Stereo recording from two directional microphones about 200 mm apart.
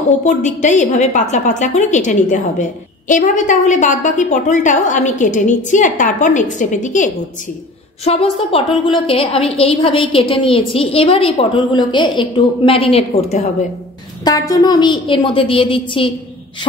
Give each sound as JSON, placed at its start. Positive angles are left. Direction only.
{"t": 0.2, "sound": "a woman's voice", "side_deg": 35}
{"t": 14.2, "sound": "a woman's voice", "side_deg": 15}